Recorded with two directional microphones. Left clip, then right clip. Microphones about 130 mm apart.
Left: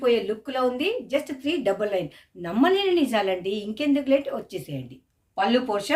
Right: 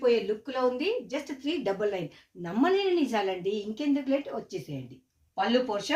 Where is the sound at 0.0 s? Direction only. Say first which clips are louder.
Left 3 dB; 5° left (ahead or behind).